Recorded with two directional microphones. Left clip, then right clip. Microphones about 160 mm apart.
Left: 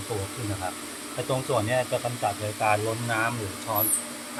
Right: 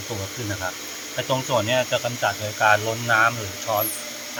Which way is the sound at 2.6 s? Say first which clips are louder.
Right 6 dB; centre (ahead or behind).